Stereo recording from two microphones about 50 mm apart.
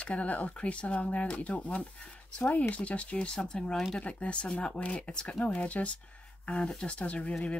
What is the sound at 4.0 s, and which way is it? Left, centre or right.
Speech, left.